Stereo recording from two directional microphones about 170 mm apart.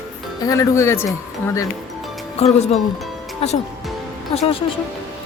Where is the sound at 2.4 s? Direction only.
35° left (ahead or behind).